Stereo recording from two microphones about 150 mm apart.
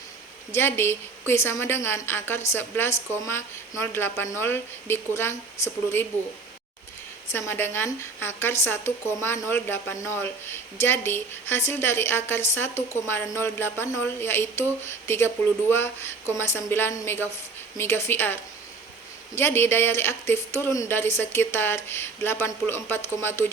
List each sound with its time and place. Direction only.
0.5 s a woman's voice: 15° left (ahead or behind)
7.3 s a woman's voice: 15° left (ahead or behind)
19.4 s a woman's voice: 15° left (ahead or behind)